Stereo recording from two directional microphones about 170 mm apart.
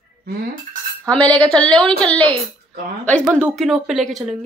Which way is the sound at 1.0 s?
10° left (ahead or behind).